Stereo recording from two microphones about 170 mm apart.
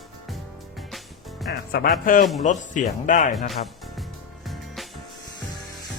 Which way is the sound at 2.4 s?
50° left (ahead or behind).